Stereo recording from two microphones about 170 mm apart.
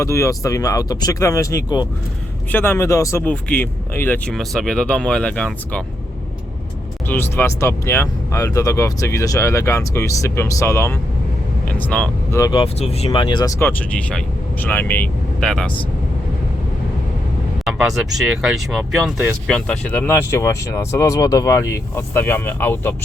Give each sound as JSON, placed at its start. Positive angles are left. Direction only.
{"t": 0.0, "sound": "speech", "side_deg": 15}
{"t": 7.1, "sound": "speech", "side_deg": 10}
{"t": 12.4, "sound": "speech", "side_deg": 30}
{"t": 13.1, "sound": "speech", "side_deg": 25}
{"t": 13.6, "sound": "speech", "side_deg": 10}
{"t": 17.7, "sound": "speech", "side_deg": -5}